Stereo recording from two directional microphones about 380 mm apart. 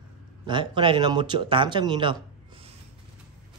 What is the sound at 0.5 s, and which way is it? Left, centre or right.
Speech, centre.